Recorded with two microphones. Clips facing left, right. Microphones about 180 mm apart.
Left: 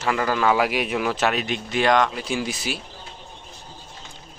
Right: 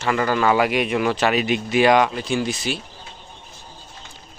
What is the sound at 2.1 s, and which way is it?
Speech, 5° left (ahead or behind).